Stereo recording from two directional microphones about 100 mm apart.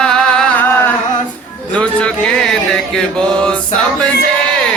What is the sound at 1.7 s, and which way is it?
Mantra, 10° left (ahead or behind).